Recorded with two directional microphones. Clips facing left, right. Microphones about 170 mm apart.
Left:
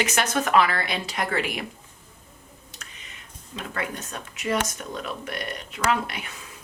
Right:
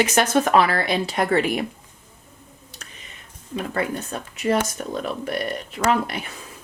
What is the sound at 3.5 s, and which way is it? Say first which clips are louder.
Speech: right 7 dB; 35° right (ahead or behind).